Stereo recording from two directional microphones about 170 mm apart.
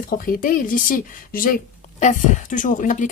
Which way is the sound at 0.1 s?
55° left (ahead or behind).